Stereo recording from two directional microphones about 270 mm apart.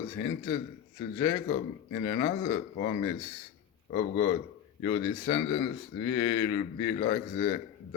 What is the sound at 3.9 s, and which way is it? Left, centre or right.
A man's voice, left.